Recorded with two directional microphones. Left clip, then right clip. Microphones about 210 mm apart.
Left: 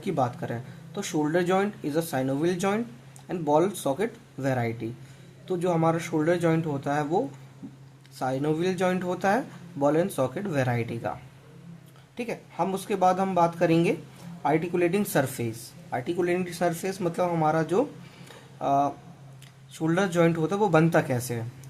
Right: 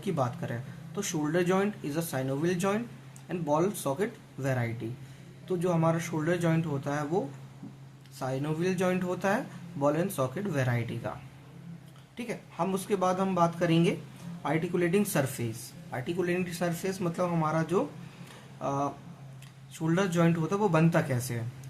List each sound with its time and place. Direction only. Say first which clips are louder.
0.0 s speech: left 4 dB; 30° left (ahead or behind)
8.2 s speech: left 5 dB; 30° left (ahead or behind)
12.1 s speech: left 5 dB; 30° left (ahead or behind)